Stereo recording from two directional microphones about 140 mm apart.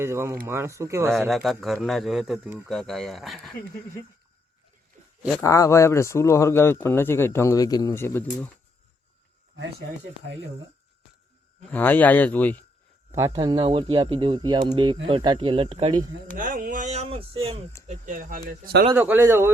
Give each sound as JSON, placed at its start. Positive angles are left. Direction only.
{"t": 0.0, "sound": "speech", "side_deg": -20}
{"t": 1.3, "sound": "a man's voice", "side_deg": 0}
{"t": 5.4, "sound": "speech", "side_deg": 25}
{"t": 11.7, "sound": "speech", "side_deg": 10}
{"t": 13.1, "sound": "a sound", "side_deg": -20}
{"t": 13.3, "sound": "speech", "side_deg": -30}
{"t": 16.2, "sound": "speech", "side_deg": -80}
{"t": 17.8, "sound": "speech", "side_deg": -70}
{"t": 18.9, "sound": "speech", "side_deg": -15}